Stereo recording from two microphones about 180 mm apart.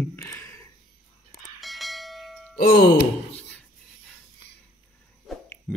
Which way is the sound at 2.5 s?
60° left (ahead or behind).